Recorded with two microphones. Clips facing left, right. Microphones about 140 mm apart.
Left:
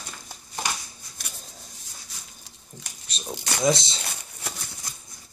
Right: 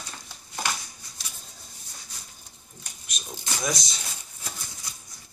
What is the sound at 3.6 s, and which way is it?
Speech, 25° left (ahead or behind).